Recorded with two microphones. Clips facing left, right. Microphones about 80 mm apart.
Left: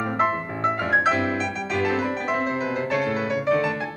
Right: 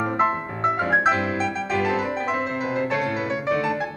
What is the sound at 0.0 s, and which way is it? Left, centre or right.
Music, centre.